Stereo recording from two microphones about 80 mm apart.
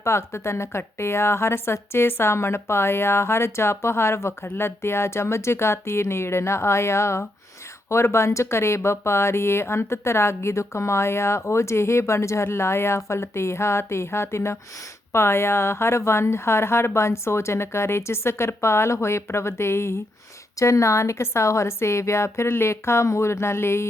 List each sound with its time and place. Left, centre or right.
0.0 s a woman's voice: left